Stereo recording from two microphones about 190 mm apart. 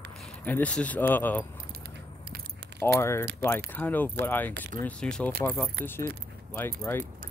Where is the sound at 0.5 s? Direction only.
5° left (ahead or behind).